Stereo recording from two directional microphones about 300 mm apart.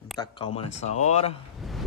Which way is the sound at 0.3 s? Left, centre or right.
Centre.